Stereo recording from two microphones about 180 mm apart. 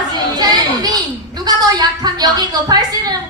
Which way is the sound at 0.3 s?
20° right (ahead or behind).